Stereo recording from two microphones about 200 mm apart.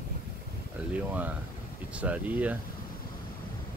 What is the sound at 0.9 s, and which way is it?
Speech, 5° right (ahead or behind).